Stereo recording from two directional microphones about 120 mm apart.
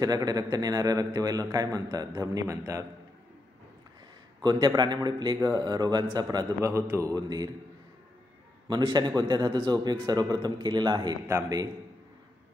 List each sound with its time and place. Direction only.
0.0 s a man's voice: 30° right (ahead or behind)
4.4 s a man's voice: 35° right (ahead or behind)
6.3 s a man's voice: 25° right (ahead or behind)
8.6 s a man's voice: 40° right (ahead or behind)
11.2 s a man's voice: 25° right (ahead or behind)